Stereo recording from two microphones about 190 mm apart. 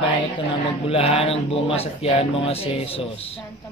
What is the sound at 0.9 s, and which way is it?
Speech, 30° left (ahead or behind).